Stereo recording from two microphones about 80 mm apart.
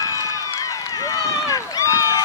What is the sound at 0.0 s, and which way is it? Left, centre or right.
Run, left.